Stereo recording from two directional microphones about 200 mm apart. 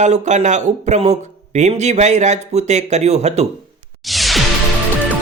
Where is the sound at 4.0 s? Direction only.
Centre (ahead or behind).